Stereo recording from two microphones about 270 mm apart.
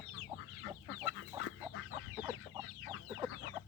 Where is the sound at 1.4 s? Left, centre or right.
Left.